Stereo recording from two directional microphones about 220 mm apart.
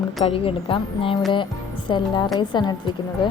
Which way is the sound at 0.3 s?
25° left (ahead or behind).